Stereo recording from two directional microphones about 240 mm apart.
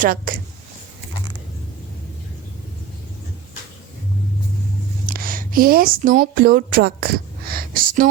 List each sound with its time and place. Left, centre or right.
0.0 s speech: right
5.0 s speech: right